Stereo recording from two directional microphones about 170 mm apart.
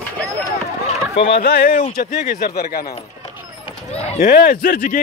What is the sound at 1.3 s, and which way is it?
Speech, 70° left (ahead or behind).